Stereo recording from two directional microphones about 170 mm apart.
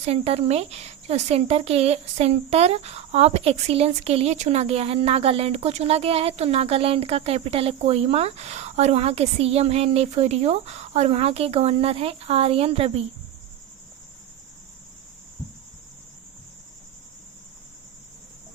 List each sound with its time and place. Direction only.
0.0 s speech: 35° right (ahead or behind)